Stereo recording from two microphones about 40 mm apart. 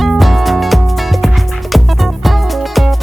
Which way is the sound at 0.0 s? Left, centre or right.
Centre.